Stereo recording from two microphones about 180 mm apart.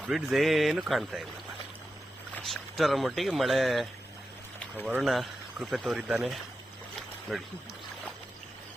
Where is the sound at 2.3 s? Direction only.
Centre (ahead or behind).